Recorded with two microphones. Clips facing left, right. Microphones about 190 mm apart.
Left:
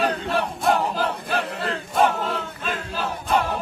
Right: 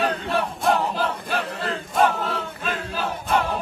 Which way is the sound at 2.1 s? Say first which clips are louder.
Even; centre (ahead or behind).